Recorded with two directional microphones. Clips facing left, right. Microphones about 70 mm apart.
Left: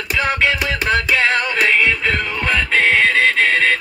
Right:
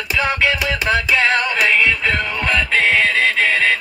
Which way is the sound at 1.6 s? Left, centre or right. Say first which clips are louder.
Left 1 dB; centre.